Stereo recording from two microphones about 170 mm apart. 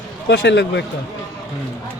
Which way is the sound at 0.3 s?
90° left.